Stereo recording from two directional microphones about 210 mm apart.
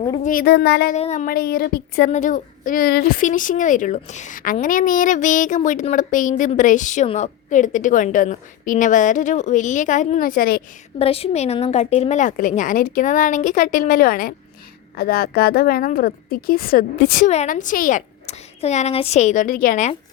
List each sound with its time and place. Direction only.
0.2 s a woman's voice: 40° left (ahead or behind)
0.9 s a woman's voice: 35° left (ahead or behind)
2.0 s a woman's voice: 35° left (ahead or behind)
10.9 s a woman's voice: 30° left (ahead or behind)